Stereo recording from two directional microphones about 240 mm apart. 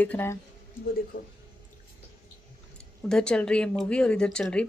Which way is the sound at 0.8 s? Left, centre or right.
Left.